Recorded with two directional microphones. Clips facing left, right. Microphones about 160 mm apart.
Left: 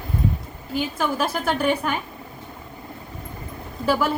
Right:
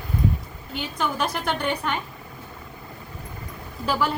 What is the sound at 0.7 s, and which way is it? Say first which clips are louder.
A woman's voice: left 4 dB; 5° left (ahead or behind).